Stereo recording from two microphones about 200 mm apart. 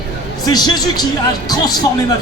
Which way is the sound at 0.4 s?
20° left (ahead or behind).